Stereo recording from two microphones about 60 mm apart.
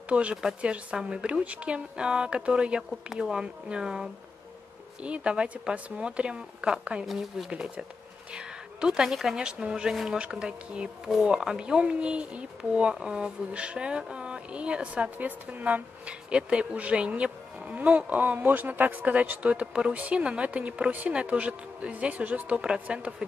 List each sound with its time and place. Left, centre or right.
0.1 s speech: centre
7.1 s a woman's voice: centre
11.1 s speech: centre